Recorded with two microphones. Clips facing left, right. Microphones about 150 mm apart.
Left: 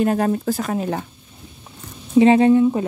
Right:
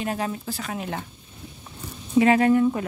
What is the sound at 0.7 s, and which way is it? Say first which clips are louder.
Speech: left 7 dB; 35° left (ahead or behind).